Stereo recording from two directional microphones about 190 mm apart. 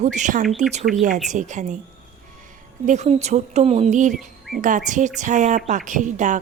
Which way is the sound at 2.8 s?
35° right (ahead or behind).